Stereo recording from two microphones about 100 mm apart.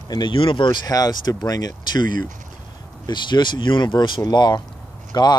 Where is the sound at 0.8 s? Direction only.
40° left (ahead or behind).